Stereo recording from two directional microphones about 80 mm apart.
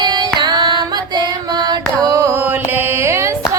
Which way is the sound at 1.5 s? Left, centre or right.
Right.